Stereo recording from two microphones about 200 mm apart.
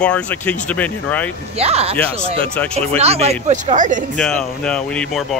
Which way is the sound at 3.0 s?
30° right (ahead or behind).